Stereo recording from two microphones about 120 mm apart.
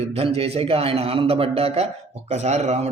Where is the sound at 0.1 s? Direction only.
55° right (ahead or behind).